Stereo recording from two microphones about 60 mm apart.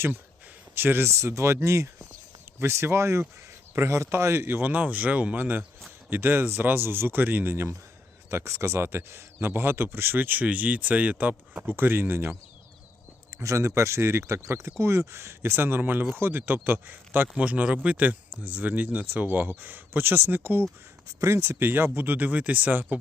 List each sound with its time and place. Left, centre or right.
0.8 s speech: right
1.1 s speech: right
4.6 s speech: right
13.4 s speech: right
21.2 s speech: right